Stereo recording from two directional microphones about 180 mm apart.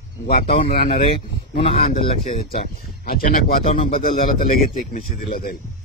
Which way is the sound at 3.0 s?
55° left (ahead or behind).